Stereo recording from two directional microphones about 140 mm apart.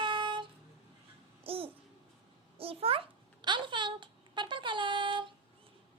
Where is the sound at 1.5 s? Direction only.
40° right (ahead or behind).